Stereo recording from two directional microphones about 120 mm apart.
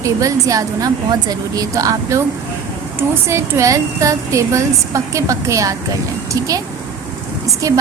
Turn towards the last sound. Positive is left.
turn(degrees=-30)  # may be behind; listen again after turning